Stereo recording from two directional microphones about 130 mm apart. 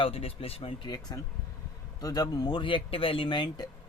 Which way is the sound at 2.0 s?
30° left (ahead or behind).